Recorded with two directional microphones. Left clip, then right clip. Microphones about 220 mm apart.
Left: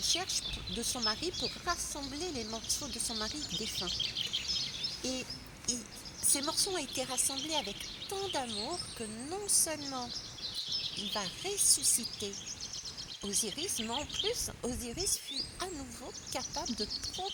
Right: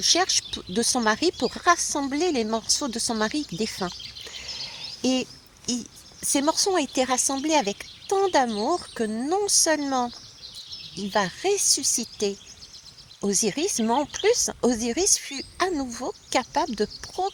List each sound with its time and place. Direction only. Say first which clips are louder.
0.0 s speech: right 12 dB; 35° right (ahead or behind)
5.0 s speech: right 12 dB; 35° right (ahead or behind)
11.1 s speech: right 13 dB; 30° right (ahead or behind)